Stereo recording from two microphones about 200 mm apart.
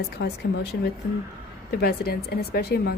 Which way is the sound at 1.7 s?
55° left (ahead or behind).